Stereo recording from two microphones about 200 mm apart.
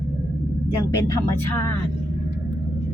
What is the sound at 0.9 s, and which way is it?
Speech, 15° left (ahead or behind).